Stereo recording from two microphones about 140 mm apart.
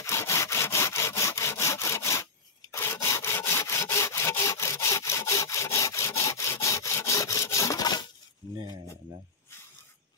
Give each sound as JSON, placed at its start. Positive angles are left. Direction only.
{"t": 0.0, "sound": "sawing", "side_deg": 20}